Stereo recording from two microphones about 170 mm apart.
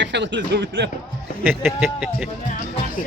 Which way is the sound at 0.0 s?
90° right.